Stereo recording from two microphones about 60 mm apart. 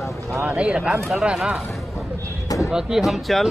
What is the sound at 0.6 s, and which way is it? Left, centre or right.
Speech, centre.